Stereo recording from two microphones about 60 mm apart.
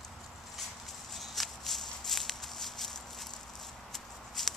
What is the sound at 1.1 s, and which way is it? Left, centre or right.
Walk, centre.